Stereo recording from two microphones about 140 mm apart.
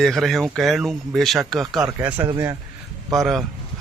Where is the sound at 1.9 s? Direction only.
15° right (ahead or behind).